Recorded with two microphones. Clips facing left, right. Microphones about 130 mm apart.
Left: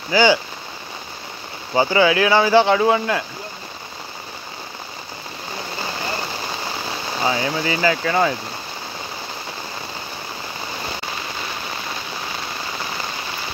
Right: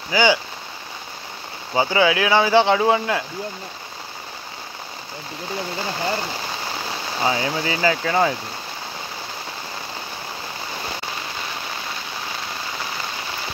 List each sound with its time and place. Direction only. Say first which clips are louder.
0.1 s speech: left 3 dB; 15° right (ahead or behind)
1.7 s speech: left 2 dB; 15° right (ahead or behind)
7.2 s speech: left 1 dB; 20° right (ahead or behind)